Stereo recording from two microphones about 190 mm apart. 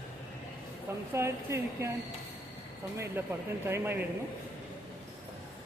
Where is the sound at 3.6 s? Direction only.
10° right (ahead or behind).